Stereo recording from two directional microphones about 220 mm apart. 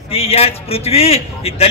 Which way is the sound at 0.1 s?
25° left (ahead or behind).